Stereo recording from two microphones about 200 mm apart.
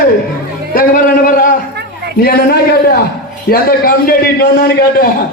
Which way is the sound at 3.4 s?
45° left (ahead or behind).